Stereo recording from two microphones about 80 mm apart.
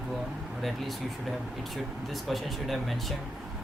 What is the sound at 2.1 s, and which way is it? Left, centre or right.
Speech, centre.